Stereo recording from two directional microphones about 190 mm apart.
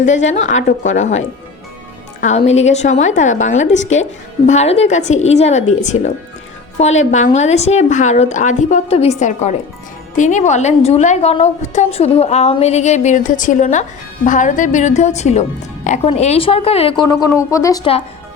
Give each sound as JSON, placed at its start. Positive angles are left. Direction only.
{"t": 0.1, "sound": "a woman's voice", "side_deg": 85}
{"t": 0.3, "sound": "a woman's voice", "side_deg": 40}
{"t": 2.2, "sound": "a woman's voice", "side_deg": 35}